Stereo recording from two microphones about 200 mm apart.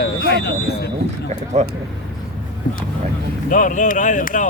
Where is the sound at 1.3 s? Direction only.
35° right (ahead or behind).